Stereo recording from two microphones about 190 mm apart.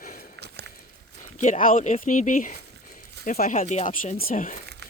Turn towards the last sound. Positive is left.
turn(degrees=40)  # may be behind; listen again after turning